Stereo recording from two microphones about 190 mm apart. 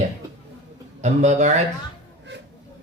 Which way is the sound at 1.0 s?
35° right (ahead or behind).